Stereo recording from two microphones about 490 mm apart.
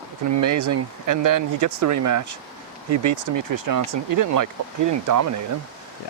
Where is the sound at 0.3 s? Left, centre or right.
Right.